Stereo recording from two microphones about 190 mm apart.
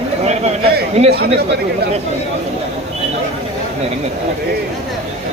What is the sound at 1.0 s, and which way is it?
Speech, 35° right (ahead or behind).